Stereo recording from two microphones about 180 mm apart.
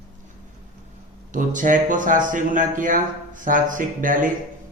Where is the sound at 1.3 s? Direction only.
45° right (ahead or behind).